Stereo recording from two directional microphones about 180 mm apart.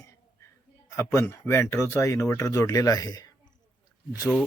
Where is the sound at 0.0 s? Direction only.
15° left (ahead or behind).